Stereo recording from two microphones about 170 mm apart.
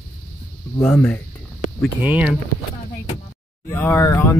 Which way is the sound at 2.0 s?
10° right (ahead or behind).